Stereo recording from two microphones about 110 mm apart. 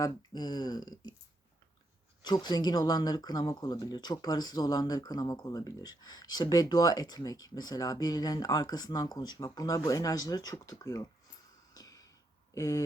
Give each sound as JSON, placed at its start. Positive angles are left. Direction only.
{"t": 0.0, "sound": "speech", "side_deg": 40}
{"t": 2.2, "sound": "speech", "side_deg": 40}
{"t": 11.7, "sound": "a sound", "side_deg": 35}
{"t": 12.5, "sound": "speech", "side_deg": 30}